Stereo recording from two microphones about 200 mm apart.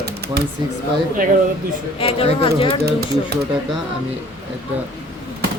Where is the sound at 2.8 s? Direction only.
55° right (ahead or behind).